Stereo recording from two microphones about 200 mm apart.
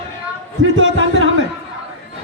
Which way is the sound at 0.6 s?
70° right (ahead or behind).